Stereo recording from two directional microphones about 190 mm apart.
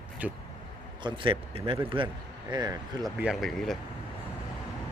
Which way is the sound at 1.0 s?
25° right (ahead or behind).